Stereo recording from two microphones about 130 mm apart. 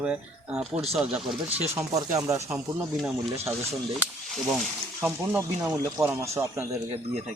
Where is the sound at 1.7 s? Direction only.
25° right (ahead or behind).